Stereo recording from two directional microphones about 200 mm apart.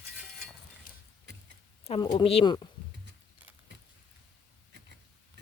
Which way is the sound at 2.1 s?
25° left (ahead or behind).